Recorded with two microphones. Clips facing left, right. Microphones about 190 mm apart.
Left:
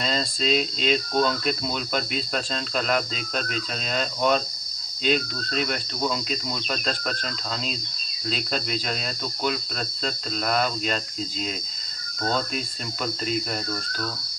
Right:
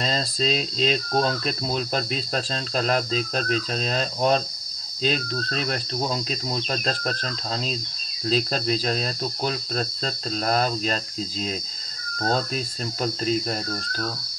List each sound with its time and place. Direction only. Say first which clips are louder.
0.0 s speech: right 1 dB; 35° right (ahead or behind)
13.0 s speech: right 3 dB; 35° right (ahead or behind)